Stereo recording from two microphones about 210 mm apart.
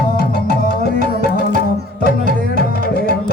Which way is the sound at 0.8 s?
45° left (ahead or behind).